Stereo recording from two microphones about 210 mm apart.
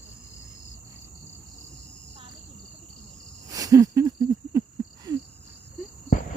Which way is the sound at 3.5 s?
15° right (ahead or behind).